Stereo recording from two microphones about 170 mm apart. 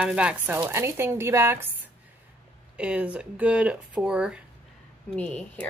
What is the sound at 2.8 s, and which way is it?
Speech, 5° right (ahead or behind).